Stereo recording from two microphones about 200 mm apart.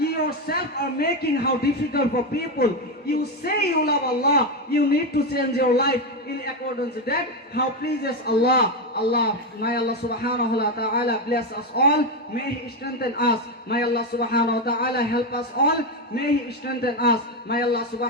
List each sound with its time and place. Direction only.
0.0 s a man's voice: 50° left (ahead or behind)
7.1 s a man's voice: 50° left (ahead or behind)